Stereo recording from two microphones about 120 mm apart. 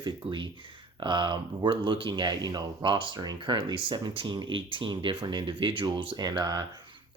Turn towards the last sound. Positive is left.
turn(degrees=-35)  # may be behind; listen again after turning